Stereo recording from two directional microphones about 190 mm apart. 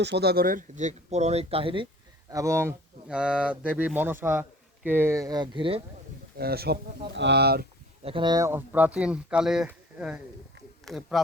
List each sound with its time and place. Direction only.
0.0 s speech: 60° right (ahead or behind); by 1.9 s 25° right (ahead or behind)
2.3 s speech: 15° right (ahead or behind)
6.3 s speech: 55° right (ahead or behind)
8.0 s speech: 25° right (ahead or behind); by 11.2 s centre (ahead or behind)